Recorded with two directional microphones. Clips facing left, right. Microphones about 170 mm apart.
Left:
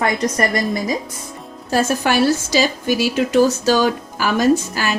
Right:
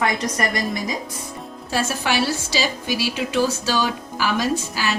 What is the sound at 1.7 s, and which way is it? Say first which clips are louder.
A woman's voice: left 6 dB; 45° left (ahead or behind).